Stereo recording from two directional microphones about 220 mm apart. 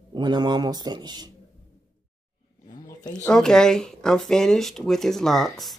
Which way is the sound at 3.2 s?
5° left (ahead or behind).